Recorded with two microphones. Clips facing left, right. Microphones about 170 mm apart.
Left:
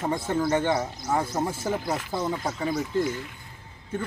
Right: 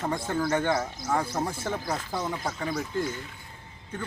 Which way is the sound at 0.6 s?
5° left (ahead or behind).